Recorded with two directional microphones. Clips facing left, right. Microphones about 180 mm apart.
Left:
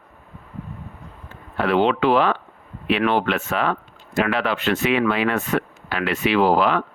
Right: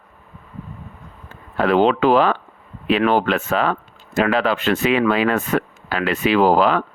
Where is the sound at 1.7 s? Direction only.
40° right (ahead or behind).